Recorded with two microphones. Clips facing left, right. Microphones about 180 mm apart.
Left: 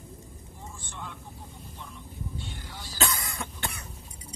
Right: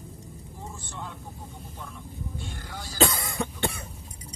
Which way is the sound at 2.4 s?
45° right (ahead or behind).